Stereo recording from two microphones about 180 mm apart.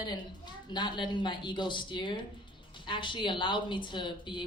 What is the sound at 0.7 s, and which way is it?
Speech, 25° left (ahead or behind).